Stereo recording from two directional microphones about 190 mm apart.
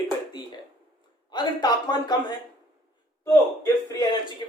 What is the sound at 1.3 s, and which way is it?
A man's voice, 20° left (ahead or behind).